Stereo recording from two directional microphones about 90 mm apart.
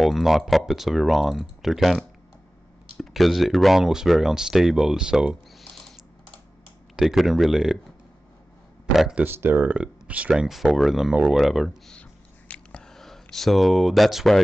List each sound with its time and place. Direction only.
0.0 s speech: centre (ahead or behind)
7.0 s speech: 5° right (ahead or behind)
8.9 s speech: 5° right (ahead or behind)
9.2 s speech: 25° right (ahead or behind)
10.3 s speech: 5° right (ahead or behind)
11.9 s a sound: 10° left (ahead or behind)